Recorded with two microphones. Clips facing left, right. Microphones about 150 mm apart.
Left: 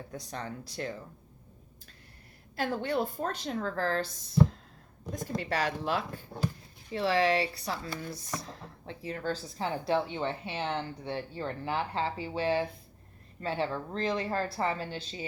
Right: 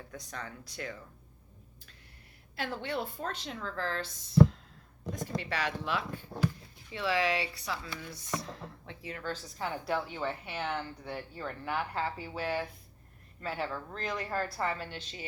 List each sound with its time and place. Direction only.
0.1 s speech: 30° left (ahead or behind)
2.6 s a woman's voice: 45° left (ahead or behind)
5.1 s a woman's voice: 40° left (ahead or behind)